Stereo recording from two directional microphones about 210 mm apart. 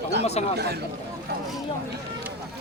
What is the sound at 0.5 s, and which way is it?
Speech, 50° right (ahead or behind).